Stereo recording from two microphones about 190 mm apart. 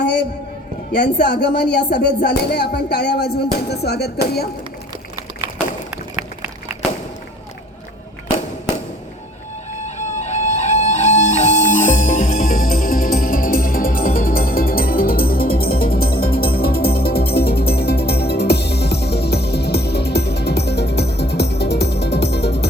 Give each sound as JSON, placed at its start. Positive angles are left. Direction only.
{"t": 1.2, "sound": "music", "side_deg": 60}
{"t": 9.8, "sound": "music", "side_deg": 35}